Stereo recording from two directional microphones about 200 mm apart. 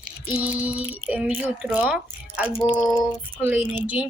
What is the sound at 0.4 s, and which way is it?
A child's voice, 10° right (ahead or behind).